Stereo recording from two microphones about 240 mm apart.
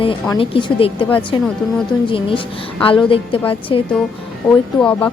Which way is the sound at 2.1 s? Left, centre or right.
Left.